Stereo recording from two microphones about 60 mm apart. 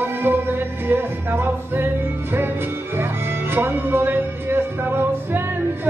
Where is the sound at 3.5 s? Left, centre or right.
Right.